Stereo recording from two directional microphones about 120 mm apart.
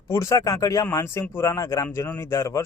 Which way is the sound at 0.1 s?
25° left (ahead or behind).